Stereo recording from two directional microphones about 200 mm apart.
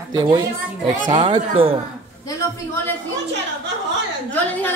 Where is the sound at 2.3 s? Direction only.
10° left (ahead or behind).